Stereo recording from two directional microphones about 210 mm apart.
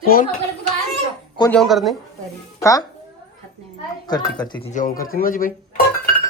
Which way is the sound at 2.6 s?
15° left (ahead or behind).